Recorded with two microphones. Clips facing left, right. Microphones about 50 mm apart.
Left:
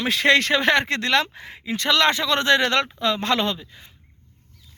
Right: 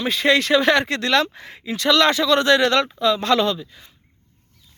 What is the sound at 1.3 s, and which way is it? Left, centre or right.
Speech, centre.